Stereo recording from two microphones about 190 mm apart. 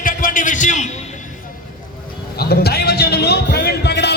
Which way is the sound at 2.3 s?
55° left (ahead or behind).